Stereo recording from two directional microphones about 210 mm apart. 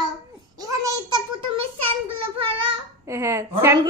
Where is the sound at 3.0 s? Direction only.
15° right (ahead or behind).